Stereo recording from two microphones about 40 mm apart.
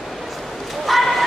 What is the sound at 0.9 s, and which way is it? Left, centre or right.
Bow-wow, centre.